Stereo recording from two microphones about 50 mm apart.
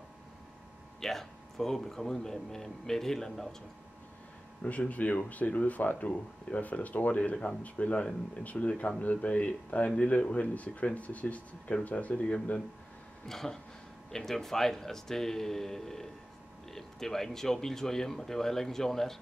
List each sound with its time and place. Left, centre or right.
1.0 s a man's voice: centre
4.6 s speech: left
13.3 s a man's voice: centre